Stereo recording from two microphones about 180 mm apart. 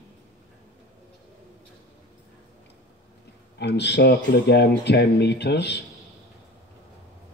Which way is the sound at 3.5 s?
70° left (ahead or behind).